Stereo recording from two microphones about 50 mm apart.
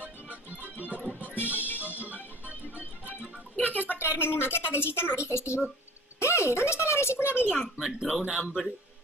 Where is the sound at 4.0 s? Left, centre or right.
Left.